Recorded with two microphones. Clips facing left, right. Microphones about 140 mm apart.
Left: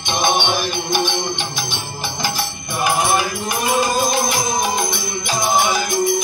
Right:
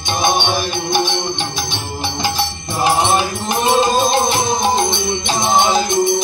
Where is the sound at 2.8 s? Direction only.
25° right (ahead or behind).